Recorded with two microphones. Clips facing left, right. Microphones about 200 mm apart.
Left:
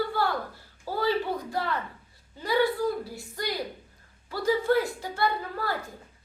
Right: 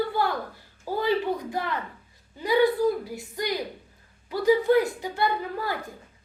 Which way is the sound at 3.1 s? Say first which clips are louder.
Right 3 dB; 15° right (ahead or behind).